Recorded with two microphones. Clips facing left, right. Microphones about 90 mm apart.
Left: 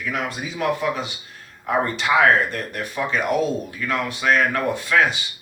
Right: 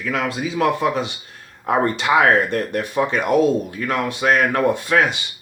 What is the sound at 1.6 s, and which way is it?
Speech, 45° right (ahead or behind).